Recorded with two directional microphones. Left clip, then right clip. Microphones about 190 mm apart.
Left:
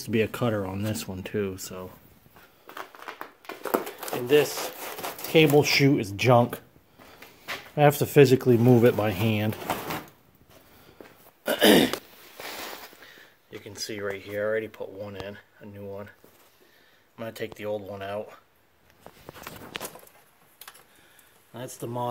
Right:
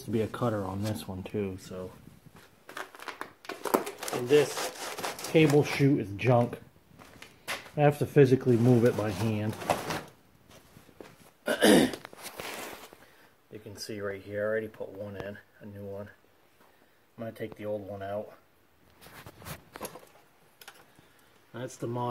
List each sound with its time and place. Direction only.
0.0 s speech: 15° left (ahead or behind)
2.6 s a sound: centre (ahead or behind)
4.3 s speech: 15° left (ahead or behind)
4.7 s zipper: centre (ahead or behind)
5.3 s speech: 15° left (ahead or behind)
7.7 s speech: 25° left (ahead or behind)
9.6 s a sound: centre (ahead or behind)
11.4 s throat clearing: 15° left (ahead or behind)
13.8 s speech: 10° left (ahead or behind)
17.2 s speech: 15° left (ahead or behind)
21.5 s speech: 20° left (ahead or behind)